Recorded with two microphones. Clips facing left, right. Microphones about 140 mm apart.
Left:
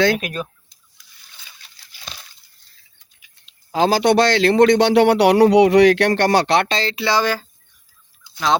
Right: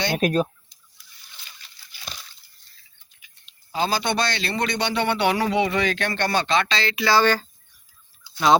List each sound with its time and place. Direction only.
0.2 s speech: 40° right (ahead or behind)
3.7 s a man's voice: 90° left; by 6.7 s 70° left (ahead or behind)
6.7 s speech: 35° left (ahead or behind)
7.0 s speech: 15° left (ahead or behind)